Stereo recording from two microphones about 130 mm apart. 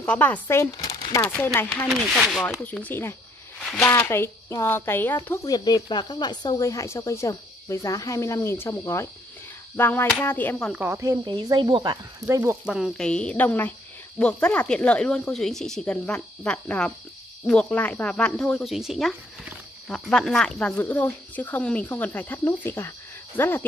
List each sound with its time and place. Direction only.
0.0 s a woman's voice: 10° left (ahead or behind)
1.9 s speech: centre (ahead or behind)
2.6 s a woman's voice: 10° left (ahead or behind)
10.8 s speech: 20° right (ahead or behind)
11.2 s speech: 35° right (ahead or behind)
12.3 s speech: 20° right (ahead or behind)
12.6 s a woman's voice: centre (ahead or behind); by 23.6 s 15° left (ahead or behind)